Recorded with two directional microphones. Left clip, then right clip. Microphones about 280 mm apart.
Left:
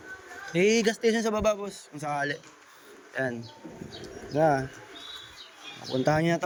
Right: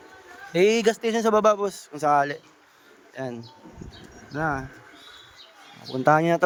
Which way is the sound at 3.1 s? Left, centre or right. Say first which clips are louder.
Left 3 dB; centre.